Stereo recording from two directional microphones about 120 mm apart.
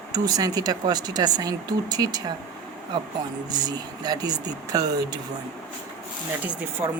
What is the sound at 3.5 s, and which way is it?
Speech, 35° right (ahead or behind).